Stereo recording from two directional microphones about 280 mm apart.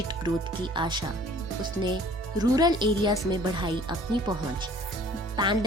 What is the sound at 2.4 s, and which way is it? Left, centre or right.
Music, centre.